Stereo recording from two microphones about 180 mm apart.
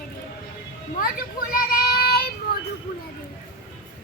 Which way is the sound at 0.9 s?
55° left (ahead or behind).